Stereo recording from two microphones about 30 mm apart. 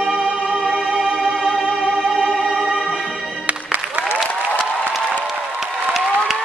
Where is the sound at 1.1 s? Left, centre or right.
Centre.